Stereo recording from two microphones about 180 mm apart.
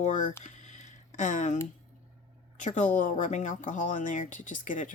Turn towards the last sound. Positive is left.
turn(degrees=45)  # may be behind; listen again after turning